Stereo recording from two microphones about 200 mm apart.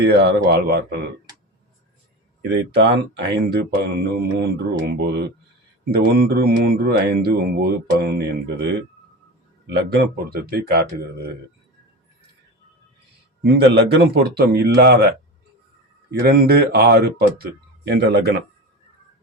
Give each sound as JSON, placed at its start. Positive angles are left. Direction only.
{"t": 0.0, "sound": "speech", "side_deg": -55}
{"t": 2.4, "sound": "speech", "side_deg": -60}
{"t": 9.6, "sound": "speech", "side_deg": -50}
{"t": 13.4, "sound": "speech", "side_deg": -55}
{"t": 16.2, "sound": "speech", "side_deg": -50}